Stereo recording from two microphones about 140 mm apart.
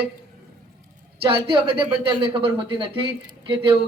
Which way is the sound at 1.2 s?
40° right (ahead or behind).